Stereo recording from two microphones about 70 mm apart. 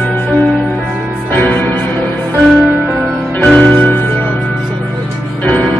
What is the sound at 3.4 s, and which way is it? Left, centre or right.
Music, centre.